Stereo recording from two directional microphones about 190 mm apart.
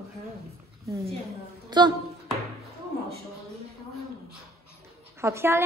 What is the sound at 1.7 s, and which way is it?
Speech, 25° right (ahead or behind).